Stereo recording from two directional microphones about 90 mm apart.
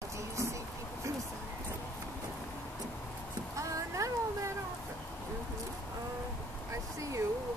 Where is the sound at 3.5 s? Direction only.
35° right (ahead or behind).